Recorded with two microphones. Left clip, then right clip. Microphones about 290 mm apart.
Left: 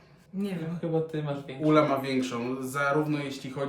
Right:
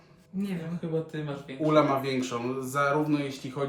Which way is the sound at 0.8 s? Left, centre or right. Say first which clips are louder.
Left 3 dB; centre.